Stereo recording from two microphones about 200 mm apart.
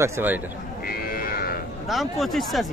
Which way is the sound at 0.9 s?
45° left (ahead or behind).